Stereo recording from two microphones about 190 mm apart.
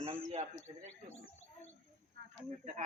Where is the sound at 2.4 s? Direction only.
35° right (ahead or behind).